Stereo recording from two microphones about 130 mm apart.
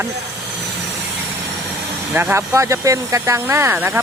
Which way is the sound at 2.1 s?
15° right (ahead or behind).